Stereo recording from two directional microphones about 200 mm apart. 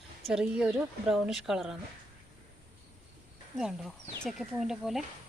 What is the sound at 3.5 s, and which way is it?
Speech, centre (ahead or behind).